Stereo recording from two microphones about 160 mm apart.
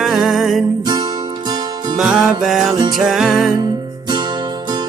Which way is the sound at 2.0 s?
5° right (ahead or behind).